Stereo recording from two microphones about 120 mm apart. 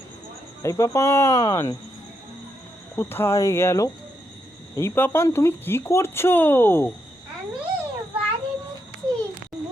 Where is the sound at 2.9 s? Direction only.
20° left (ahead or behind).